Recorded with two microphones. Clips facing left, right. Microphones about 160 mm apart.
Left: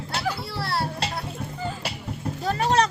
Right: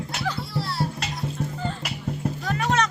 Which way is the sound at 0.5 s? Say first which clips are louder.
Even; 65° left (ahead or behind).